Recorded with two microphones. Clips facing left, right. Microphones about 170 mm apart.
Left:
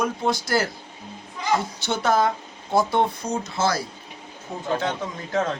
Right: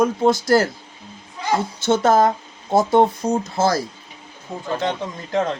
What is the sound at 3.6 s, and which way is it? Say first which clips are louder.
Speech: right 3 dB; 40° right (ahead or behind).